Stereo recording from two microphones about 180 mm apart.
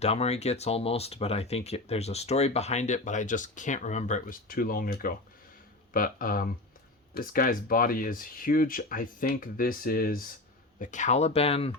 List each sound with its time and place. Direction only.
0.0 s speech: 35° left (ahead or behind); by 10.2 s 55° left (ahead or behind)
10.8 s speech: 45° left (ahead or behind)